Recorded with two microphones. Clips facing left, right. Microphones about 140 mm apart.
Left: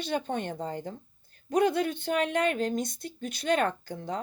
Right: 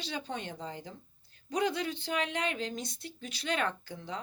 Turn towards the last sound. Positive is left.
turn(degrees=45)  # may be behind; listen again after turning